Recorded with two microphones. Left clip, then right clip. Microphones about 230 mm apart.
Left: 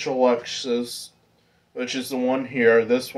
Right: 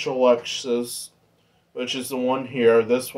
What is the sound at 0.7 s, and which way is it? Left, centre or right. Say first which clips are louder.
Speech: even; centre.